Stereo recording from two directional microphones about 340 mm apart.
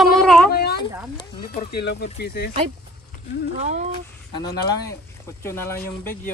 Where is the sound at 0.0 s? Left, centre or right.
Centre.